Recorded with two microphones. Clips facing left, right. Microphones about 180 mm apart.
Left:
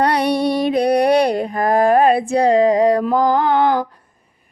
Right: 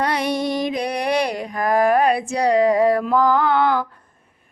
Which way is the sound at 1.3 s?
30° left (ahead or behind).